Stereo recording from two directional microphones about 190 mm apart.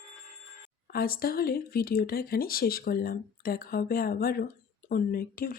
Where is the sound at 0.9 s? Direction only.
55° left (ahead or behind).